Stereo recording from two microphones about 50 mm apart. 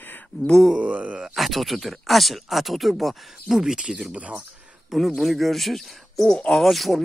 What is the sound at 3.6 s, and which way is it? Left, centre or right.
Speech, centre.